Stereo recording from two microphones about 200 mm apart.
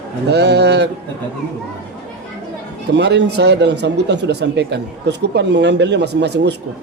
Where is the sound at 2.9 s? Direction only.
60° right (ahead or behind).